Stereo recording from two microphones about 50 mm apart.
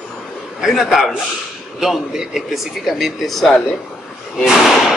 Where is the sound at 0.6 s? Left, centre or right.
Centre.